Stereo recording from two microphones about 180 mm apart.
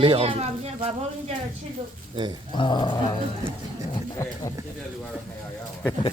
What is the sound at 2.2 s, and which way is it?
Speech, 25° right (ahead or behind).